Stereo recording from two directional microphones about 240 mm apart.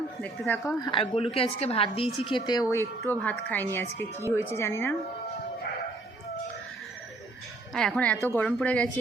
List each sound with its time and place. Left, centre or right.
0.2 s a woman's voice: centre
7.7 s speech: centre